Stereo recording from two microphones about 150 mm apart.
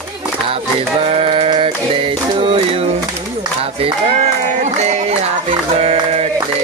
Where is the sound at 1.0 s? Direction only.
40° right (ahead or behind).